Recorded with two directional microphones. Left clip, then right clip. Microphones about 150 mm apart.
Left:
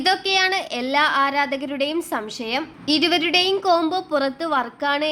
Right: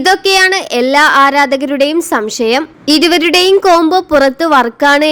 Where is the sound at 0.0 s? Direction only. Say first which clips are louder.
Right 10 dB; 40° right (ahead or behind).